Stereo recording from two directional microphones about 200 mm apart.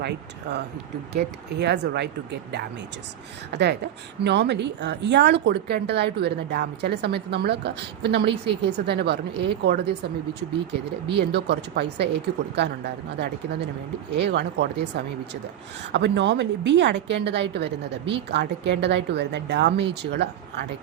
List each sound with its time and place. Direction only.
0.0 s a woman's voice: 55° right (ahead or behind)
11.2 s a woman's voice: 55° right (ahead or behind)